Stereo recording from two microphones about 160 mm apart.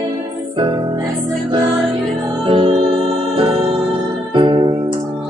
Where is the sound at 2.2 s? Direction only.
35° right (ahead or behind).